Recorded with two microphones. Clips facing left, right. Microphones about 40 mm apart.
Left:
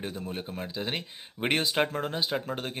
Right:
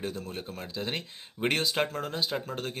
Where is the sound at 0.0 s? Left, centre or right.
Centre.